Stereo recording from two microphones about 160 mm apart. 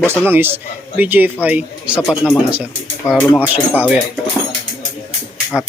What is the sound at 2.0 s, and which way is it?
Speech, 20° left (ahead or behind).